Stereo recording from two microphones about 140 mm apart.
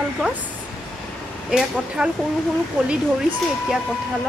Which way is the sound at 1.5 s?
5° right (ahead or behind).